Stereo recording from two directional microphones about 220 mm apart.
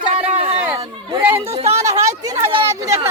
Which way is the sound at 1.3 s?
25° right (ahead or behind).